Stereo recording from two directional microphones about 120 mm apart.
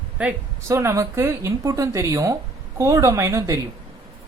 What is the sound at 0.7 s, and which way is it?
A woman's voice, 25° right (ahead or behind).